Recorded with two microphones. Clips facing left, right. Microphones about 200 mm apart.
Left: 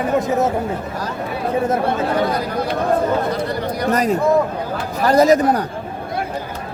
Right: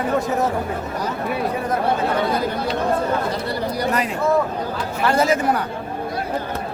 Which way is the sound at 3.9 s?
40° left (ahead or behind).